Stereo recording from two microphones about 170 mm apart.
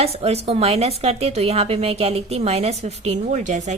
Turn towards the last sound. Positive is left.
turn(degrees=-45)  # may be behind; listen again after turning